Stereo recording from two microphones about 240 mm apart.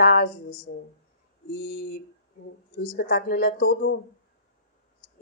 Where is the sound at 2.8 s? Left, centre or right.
Left.